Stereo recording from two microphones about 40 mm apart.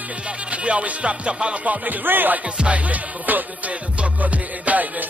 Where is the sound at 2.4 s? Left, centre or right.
Right.